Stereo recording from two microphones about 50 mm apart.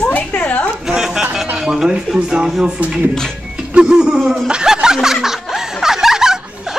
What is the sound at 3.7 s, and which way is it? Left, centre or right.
Snicker, centre.